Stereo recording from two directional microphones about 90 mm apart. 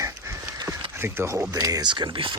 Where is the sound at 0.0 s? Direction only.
35° right (ahead or behind).